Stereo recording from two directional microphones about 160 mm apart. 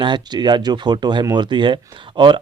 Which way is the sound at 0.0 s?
30° right (ahead or behind).